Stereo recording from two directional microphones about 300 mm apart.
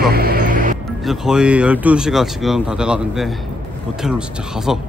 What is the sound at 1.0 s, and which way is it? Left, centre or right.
Speech, centre.